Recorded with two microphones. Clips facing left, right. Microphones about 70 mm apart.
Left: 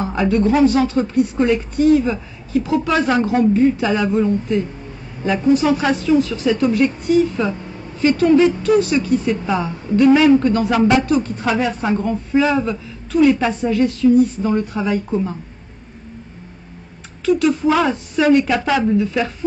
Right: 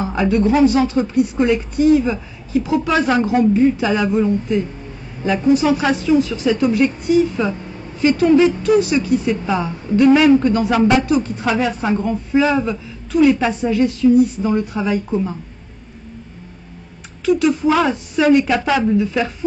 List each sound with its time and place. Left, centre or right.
0.0 s speech: centre
17.2 s a woman's voice: centre